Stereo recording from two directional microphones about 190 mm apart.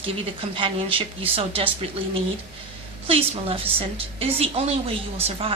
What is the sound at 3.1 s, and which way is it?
A woman's voice, 30° right (ahead or behind).